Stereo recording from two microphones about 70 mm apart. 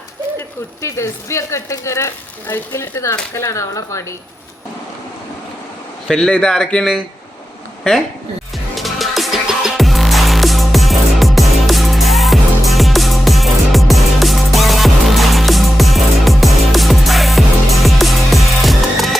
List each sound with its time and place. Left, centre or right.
0.8 s speech: left
6.1 s speech: centre
8.7 s music: centre